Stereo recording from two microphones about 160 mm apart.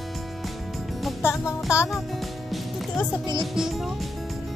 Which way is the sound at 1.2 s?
20° left (ahead or behind).